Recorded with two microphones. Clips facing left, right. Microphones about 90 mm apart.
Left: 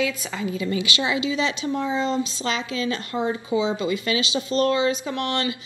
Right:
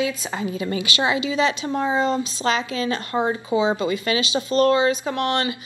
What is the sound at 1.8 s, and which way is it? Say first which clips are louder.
Speech: right 4 dB; 65° right (ahead or behind).